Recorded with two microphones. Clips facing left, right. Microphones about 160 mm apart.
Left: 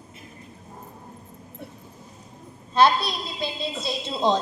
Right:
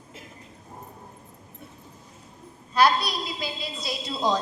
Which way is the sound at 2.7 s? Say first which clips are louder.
Left 2 dB; 25° left (ahead or behind).